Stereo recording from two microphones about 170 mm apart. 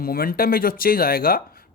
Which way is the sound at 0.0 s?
60° left (ahead or behind).